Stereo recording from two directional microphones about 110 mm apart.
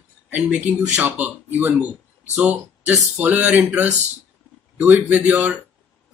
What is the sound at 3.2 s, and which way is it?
Speech, 15° right (ahead or behind).